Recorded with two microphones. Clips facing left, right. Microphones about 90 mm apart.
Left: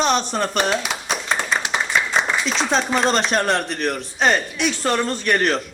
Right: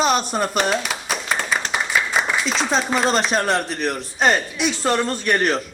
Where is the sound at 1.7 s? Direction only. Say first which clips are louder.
Even; 5° right (ahead or behind).